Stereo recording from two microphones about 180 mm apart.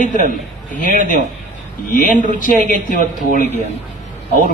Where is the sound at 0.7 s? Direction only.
45° left (ahead or behind).